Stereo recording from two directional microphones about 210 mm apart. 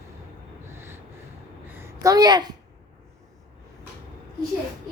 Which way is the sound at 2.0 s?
20° right (ahead or behind).